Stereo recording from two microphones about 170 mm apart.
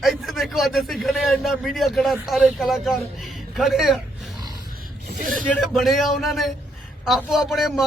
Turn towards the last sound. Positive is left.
turn(degrees=0)  # may be behind; listen again after turning